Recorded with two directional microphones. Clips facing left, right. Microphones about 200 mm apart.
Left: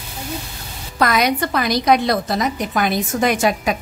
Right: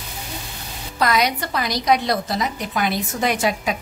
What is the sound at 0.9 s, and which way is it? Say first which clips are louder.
A woman's voice: left 3 dB; 50° left (ahead or behind).